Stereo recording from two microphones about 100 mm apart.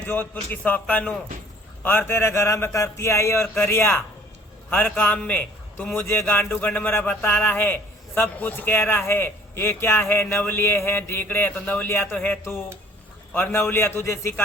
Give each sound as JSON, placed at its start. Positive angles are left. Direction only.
{"t": 0.0, "sound": "a man's voice", "side_deg": 20}